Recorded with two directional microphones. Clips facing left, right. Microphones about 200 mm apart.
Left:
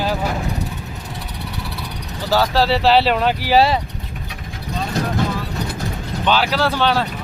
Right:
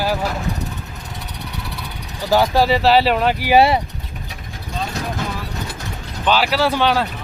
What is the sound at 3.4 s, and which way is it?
Speech, 20° right (ahead or behind).